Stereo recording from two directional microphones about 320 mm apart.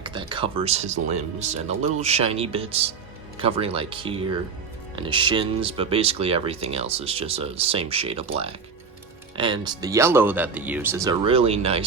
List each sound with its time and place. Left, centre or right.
0.0 s speech: centre
9.4 s speech: centre